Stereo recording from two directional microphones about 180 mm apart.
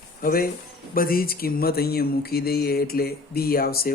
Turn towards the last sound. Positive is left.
turn(degrees=55)  # may be behind; listen again after turning